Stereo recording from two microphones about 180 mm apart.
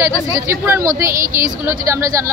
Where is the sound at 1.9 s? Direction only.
15° right (ahead or behind).